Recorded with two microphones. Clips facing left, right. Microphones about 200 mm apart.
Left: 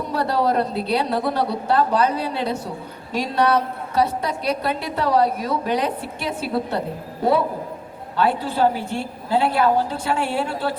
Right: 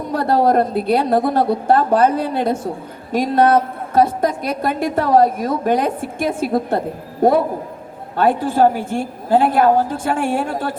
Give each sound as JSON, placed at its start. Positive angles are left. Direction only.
{"t": 0.1, "sound": "a woman's voice", "side_deg": -50}